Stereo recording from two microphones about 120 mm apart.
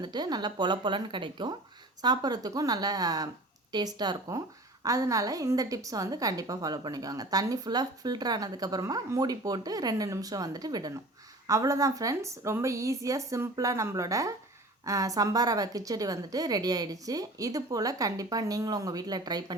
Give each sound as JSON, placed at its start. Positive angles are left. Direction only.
{"t": 0.0, "sound": "a woman's voice", "side_deg": -35}